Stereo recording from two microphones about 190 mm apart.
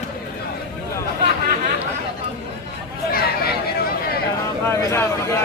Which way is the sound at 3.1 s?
55° left (ahead or behind).